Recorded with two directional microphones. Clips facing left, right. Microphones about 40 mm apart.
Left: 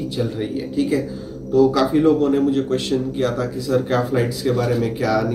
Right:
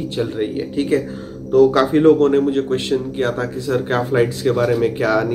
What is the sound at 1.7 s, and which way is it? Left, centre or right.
A man's voice, right.